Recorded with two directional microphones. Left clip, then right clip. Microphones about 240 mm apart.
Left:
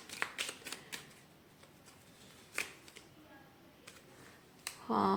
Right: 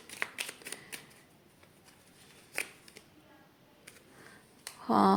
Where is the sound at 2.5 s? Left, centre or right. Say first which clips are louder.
Right 2 dB; centre.